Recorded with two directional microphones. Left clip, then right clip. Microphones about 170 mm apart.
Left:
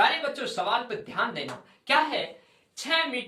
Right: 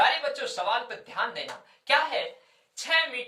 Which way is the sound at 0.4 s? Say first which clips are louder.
Left 1 dB; 15° right (ahead or behind).